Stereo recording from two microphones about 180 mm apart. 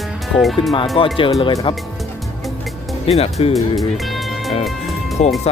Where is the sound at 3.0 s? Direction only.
35° left (ahead or behind).